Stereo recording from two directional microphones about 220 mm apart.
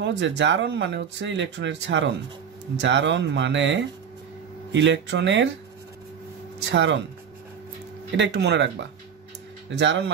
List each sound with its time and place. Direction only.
0.0 s speech: 55° right (ahead or behind)
6.6 s speech: 55° right (ahead or behind)
8.2 s speech: 50° right (ahead or behind)